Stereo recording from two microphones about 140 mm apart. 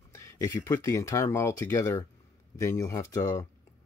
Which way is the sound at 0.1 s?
25° left (ahead or behind).